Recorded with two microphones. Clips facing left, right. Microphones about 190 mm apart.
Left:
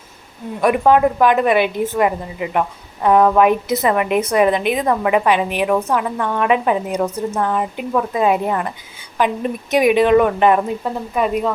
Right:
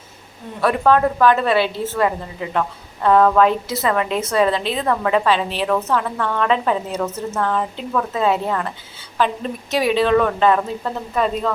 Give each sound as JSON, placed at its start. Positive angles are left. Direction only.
{"t": 0.6, "sound": "a woman's voice", "side_deg": 15}